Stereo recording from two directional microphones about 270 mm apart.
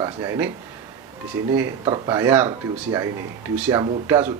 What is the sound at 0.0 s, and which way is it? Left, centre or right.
Speech, centre.